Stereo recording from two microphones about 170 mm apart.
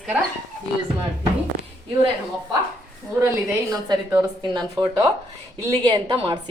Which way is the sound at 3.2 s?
20° right (ahead or behind).